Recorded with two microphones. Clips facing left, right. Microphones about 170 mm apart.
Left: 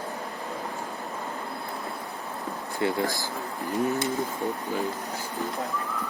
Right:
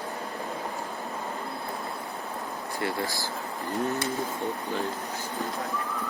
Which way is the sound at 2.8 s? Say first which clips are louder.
Left 4 dB; 20° left (ahead or behind).